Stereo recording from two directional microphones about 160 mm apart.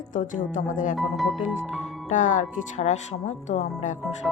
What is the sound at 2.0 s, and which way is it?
A woman's voice, 50° left (ahead or behind).